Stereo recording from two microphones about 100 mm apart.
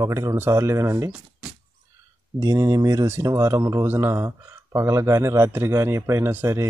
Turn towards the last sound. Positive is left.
turn(degrees=-25)  # may be behind; listen again after turning